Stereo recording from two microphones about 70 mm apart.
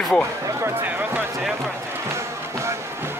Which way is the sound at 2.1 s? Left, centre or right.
Right.